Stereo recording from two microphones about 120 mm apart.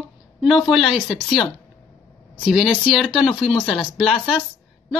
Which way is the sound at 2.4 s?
5° right (ahead or behind).